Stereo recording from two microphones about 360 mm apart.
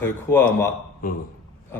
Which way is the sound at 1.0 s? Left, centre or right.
Left.